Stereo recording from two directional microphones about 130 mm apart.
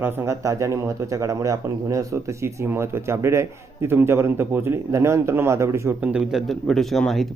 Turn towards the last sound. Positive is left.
turn(degrees=0)  # may be behind; listen again after turning